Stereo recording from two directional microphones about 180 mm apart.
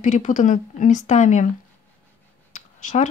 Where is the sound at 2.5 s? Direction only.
40° left (ahead or behind).